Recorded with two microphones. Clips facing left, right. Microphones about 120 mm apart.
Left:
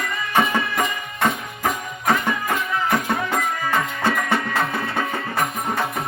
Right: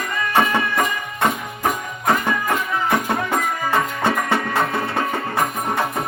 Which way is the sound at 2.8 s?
25° right (ahead or behind).